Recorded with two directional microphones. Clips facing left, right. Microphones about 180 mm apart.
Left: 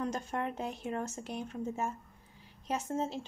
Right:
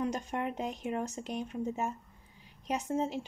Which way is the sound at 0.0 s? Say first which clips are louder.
Right 1 dB; 15° right (ahead or behind).